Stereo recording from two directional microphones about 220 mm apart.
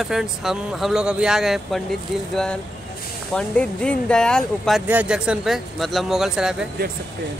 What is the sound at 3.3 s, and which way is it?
Speech, 5° left (ahead or behind).